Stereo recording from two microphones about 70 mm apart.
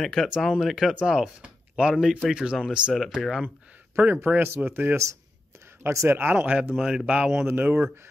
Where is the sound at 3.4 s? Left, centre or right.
Right.